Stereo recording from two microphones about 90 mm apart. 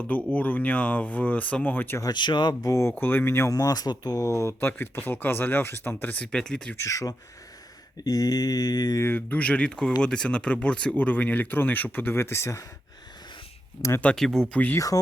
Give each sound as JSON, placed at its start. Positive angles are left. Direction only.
{"t": 0.3, "sound": "speech", "side_deg": 15}
{"t": 2.0, "sound": "speech", "side_deg": 50}
{"t": 2.6, "sound": "speech", "side_deg": 35}
{"t": 2.9, "sound": "speech", "side_deg": 20}
{"t": 3.5, "sound": "speech", "side_deg": 45}
{"t": 4.6, "sound": "speech", "side_deg": 25}
{"t": 6.2, "sound": "speech", "side_deg": 5}
{"t": 6.7, "sound": "speech", "side_deg": 35}
{"t": 9.0, "sound": "speech", "side_deg": 20}
{"t": 14.0, "sound": "speech", "side_deg": 15}